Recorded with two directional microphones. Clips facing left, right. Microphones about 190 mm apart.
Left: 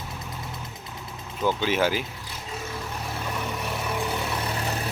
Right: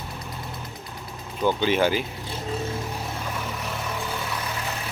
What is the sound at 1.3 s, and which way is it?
Speech, centre (ahead or behind).